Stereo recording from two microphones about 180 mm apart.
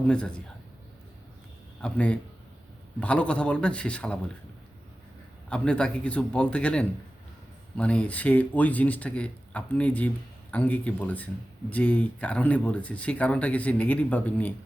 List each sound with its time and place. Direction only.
0.1 s speech: 5° left (ahead or behind)
1.8 s speech: 5° left (ahead or behind)
5.5 s speech: 5° left (ahead or behind)